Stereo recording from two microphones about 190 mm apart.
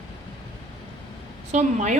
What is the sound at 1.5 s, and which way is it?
Speech, 40° right (ahead or behind).